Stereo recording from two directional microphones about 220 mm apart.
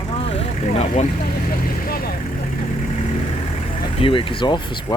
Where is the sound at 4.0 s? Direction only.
25° left (ahead or behind).